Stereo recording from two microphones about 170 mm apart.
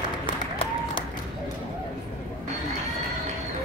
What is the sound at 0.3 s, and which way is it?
Applause, 30° left (ahead or behind).